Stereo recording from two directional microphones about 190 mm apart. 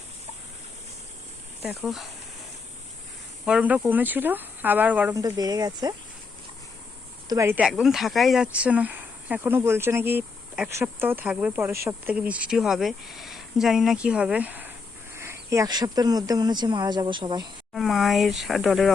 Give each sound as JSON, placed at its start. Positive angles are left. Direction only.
{"t": 1.6, "sound": "speech", "side_deg": 0}
{"t": 3.4, "sound": "speech", "side_deg": -5}
{"t": 5.2, "sound": "speech", "side_deg": -20}
{"t": 7.3, "sound": "speech", "side_deg": -15}
{"t": 17.7, "sound": "speech", "side_deg": 0}